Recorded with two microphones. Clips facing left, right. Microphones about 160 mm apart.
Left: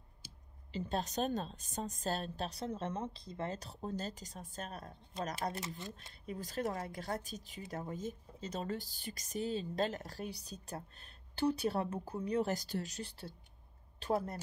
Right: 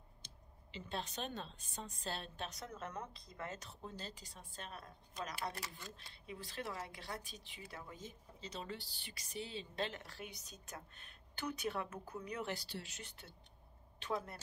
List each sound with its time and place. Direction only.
0.7 s a woman's voice: 40° left (ahead or behind)
5.1 s speech: 30° left (ahead or behind)
6.2 s speech: 45° left (ahead or behind)